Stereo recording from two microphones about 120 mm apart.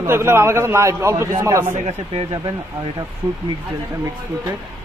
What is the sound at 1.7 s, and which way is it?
Speech, 70° right (ahead or behind).